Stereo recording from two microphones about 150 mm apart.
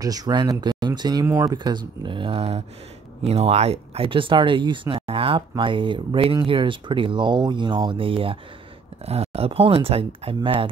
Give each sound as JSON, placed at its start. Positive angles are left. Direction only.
{"t": 0.0, "sound": "speech", "side_deg": -25}